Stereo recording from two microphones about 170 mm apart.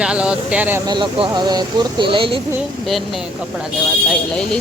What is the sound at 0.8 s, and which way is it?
Speech, 25° right (ahead or behind).